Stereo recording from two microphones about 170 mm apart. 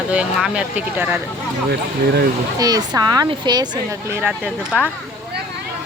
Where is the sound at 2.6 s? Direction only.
20° right (ahead or behind).